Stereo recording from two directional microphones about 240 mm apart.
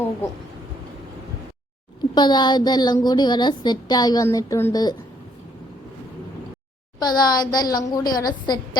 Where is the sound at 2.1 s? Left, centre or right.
Centre.